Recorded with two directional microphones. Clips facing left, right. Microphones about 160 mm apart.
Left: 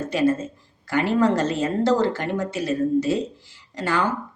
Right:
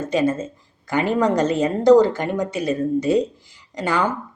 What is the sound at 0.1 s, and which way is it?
Speech, 20° right (ahead or behind).